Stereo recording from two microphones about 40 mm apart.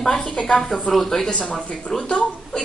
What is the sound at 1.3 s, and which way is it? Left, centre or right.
Speech, left.